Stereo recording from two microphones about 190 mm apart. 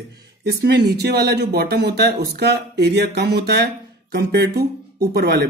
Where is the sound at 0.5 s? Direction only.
60° right (ahead or behind).